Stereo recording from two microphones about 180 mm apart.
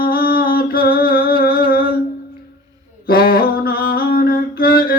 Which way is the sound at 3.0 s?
55° left (ahead or behind).